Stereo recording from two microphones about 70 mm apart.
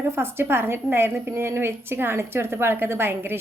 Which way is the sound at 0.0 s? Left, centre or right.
Right.